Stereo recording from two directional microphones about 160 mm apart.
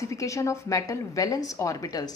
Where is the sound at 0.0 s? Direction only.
20° left (ahead or behind).